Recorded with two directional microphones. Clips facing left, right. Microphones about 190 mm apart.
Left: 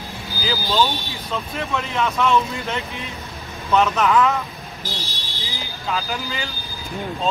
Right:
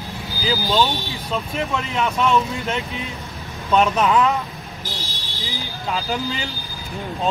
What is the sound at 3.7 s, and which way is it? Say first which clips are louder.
Speech: right 1 dB; 15° right (ahead or behind).